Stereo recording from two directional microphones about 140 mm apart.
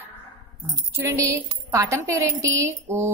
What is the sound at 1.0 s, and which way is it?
Speech, 20° right (ahead or behind).